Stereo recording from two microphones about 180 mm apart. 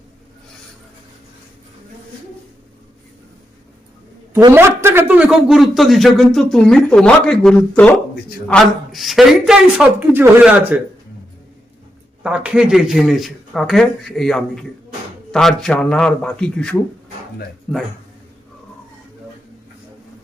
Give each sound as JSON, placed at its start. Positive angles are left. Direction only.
{"t": 4.4, "sound": "a man's voice", "side_deg": -15}
{"t": 12.2, "sound": "a man's voice", "side_deg": -5}